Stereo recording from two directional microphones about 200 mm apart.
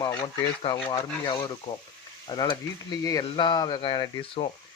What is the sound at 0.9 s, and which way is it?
Speech, 15° left (ahead or behind).